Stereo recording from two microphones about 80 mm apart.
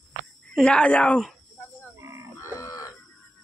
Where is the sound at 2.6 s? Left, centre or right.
Left.